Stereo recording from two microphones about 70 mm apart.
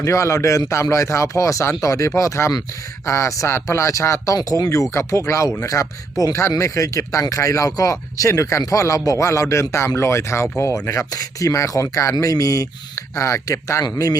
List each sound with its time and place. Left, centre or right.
0.0 s speech: left
4.4 s a man's voice: left